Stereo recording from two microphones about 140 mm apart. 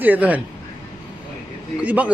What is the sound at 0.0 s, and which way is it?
Speech, 10° right (ahead or behind).